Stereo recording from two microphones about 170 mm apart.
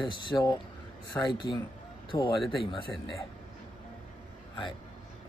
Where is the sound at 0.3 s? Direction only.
25° left (ahead or behind).